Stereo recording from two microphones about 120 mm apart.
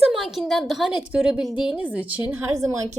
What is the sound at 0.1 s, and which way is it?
A woman's voice, centre (ahead or behind).